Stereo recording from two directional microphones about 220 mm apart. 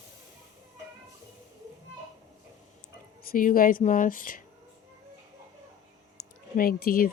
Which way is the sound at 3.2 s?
40° left (ahead or behind).